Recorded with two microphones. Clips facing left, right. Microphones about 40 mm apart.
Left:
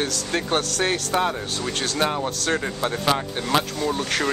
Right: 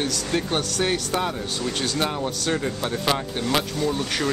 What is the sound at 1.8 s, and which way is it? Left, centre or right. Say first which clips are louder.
Speech: left 3 dB; centre.